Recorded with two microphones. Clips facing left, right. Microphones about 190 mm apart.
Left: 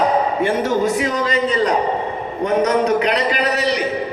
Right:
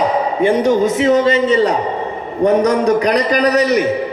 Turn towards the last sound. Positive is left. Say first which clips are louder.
# right 6 dB
turn(degrees=-45)  # may be behind; listen again after turning